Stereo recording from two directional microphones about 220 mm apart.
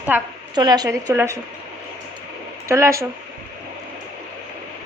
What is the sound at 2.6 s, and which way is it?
Speech, 15° right (ahead or behind).